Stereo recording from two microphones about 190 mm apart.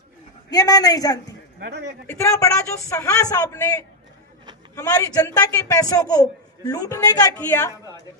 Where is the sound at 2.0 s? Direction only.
15° left (ahead or behind).